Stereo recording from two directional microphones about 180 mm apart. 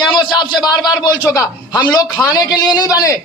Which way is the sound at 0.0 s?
25° left (ahead or behind).